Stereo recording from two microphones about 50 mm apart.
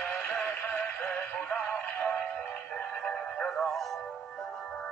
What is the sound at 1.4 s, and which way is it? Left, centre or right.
Synthetic singing, left.